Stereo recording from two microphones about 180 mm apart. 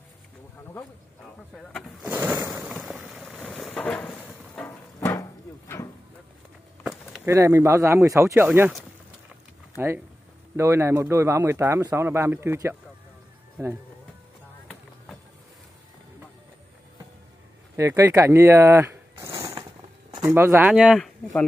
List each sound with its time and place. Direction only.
1.5 s speech: centre (ahead or behind)
2.0 s a sound: 10° right (ahead or behind)
2.6 s boat: centre (ahead or behind)
7.2 s speech: 15° right (ahead or behind)
9.8 s speech: 10° right (ahead or behind)
17.7 s speech: 15° right (ahead or behind)